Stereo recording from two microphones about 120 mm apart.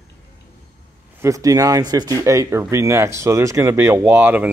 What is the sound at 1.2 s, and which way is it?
Speech, 30° right (ahead or behind).